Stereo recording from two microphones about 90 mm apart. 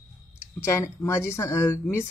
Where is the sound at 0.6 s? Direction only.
30° left (ahead or behind).